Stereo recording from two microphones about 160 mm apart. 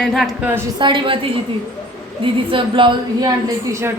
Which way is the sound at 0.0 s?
Centre (ahead or behind).